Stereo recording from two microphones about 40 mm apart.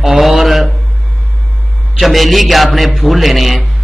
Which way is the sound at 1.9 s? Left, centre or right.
Centre.